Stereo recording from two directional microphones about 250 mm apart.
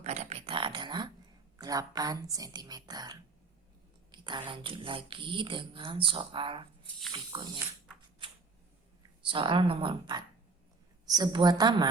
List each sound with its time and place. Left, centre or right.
0.0 s a sound: right
1.5 s a woman's voice: centre
9.2 s a woman's voice: centre